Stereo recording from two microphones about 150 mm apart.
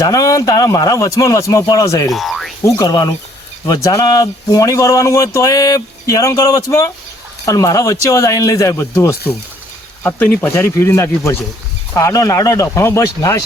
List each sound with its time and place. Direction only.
0.0 s speech: 25° left (ahead or behind)
2.0 s frog: centre (ahead or behind)
2.6 s speech: 20° left (ahead or behind)